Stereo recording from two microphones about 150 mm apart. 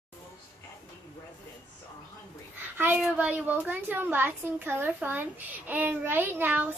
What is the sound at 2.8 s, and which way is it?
A child's voice, 10° right (ahead or behind).